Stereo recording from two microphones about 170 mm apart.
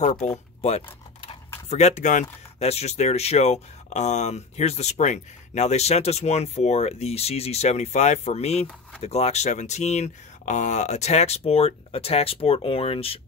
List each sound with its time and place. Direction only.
0.6 s speech: 40° left (ahead or behind)